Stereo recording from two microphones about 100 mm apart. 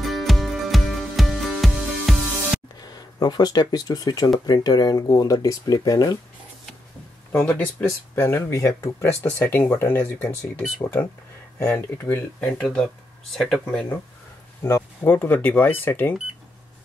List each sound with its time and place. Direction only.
0.0 s music: centre (ahead or behind)
2.8 s speech: 45° left (ahead or behind)
8.2 s speech: 25° left (ahead or behind)
12.4 s speech: 5° left (ahead or behind)
15.0 s speech: 20° left (ahead or behind)